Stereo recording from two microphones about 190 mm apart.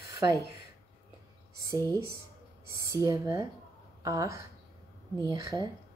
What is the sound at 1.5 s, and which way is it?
Speech, 15° right (ahead or behind).